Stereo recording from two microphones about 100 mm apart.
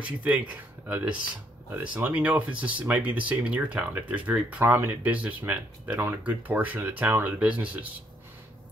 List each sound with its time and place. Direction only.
0.0 s speech: 15° right (ahead or behind)